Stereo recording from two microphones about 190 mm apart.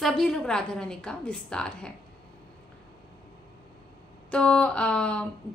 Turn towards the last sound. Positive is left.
turn(degrees=5)  # may be behind; listen again after turning